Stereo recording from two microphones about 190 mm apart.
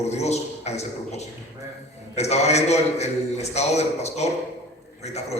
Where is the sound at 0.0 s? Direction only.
35° left (ahead or behind).